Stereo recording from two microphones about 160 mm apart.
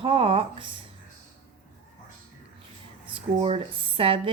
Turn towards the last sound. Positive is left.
turn(degrees=-35)  # may be behind; listen again after turning